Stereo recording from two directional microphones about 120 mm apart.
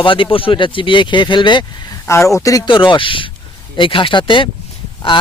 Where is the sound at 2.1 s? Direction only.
20° left (ahead or behind).